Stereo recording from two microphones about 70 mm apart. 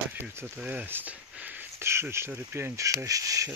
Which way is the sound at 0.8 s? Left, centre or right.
Right.